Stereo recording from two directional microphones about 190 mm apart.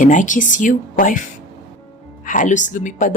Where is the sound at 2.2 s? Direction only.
40° left (ahead or behind).